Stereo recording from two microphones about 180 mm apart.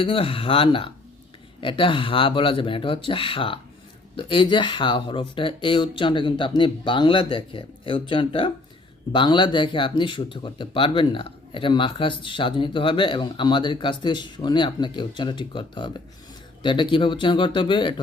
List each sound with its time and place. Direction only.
0.0 s speech: 30° left (ahead or behind)